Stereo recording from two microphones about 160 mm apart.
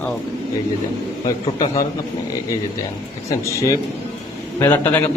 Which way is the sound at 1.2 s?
20° left (ahead or behind).